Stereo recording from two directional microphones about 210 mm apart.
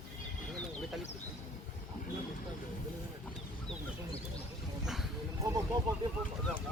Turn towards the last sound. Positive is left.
turn(degrees=-20)  # may be behind; listen again after turning